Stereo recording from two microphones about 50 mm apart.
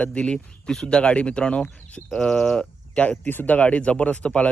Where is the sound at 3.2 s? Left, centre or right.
Left.